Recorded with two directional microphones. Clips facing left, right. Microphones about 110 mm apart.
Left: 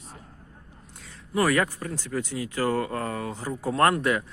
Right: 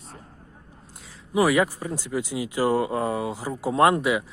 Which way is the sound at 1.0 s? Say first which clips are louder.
Right 3 dB; 10° right (ahead or behind).